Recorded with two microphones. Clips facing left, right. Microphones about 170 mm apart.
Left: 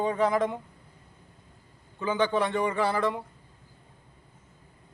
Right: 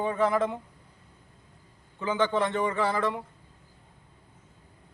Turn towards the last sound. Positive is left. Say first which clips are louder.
# left 1 dB
turn(degrees=15)  # may be behind; listen again after turning